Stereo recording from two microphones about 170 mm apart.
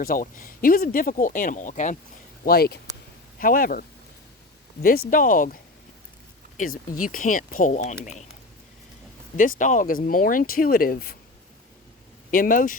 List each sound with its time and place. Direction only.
0.0 s speech: 55° left (ahead or behind)
2.4 s speech: 65° left (ahead or behind)
6.6 s speech: 55° left (ahead or behind)
9.4 s speech: 50° left (ahead or behind)
12.3 s speech: 55° left (ahead or behind)